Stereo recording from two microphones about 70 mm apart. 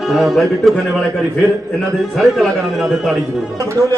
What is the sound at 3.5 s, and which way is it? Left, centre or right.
Speech, right.